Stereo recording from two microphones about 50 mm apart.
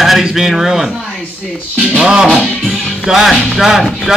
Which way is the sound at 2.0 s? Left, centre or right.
Centre.